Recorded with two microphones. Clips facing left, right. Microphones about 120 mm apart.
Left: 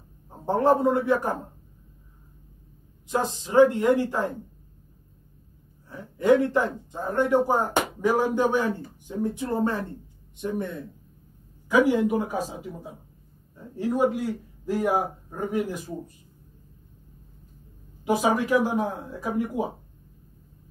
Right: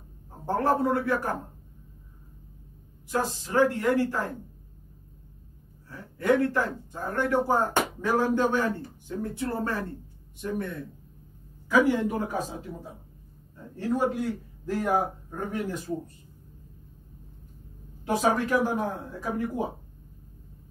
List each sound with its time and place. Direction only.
0.5 s a man's voice: 20° left (ahead or behind)
3.1 s a man's voice: 20° left (ahead or behind)
5.9 s a man's voice: 20° left (ahead or behind)
18.0 s a man's voice: 10° left (ahead or behind)